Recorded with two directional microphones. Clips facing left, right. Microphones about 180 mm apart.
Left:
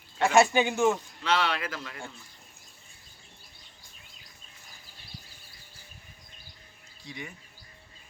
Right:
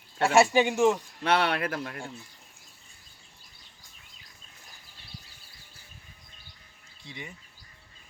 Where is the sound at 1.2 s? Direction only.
60° right (ahead or behind).